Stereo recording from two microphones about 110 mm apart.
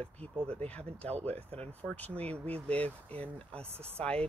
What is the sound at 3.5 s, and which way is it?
Speech, 65° right (ahead or behind).